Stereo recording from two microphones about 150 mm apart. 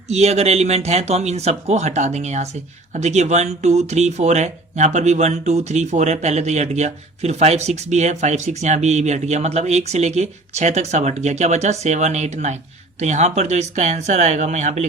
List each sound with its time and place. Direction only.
0.1 s speech: 45° right (ahead or behind)